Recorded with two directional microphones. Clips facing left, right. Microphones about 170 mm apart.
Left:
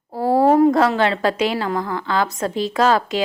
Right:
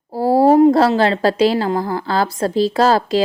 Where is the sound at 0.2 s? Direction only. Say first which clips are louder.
Right 3 dB; 30° right (ahead or behind).